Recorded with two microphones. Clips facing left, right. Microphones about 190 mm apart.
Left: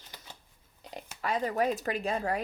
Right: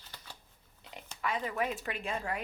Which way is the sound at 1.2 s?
40° left (ahead or behind).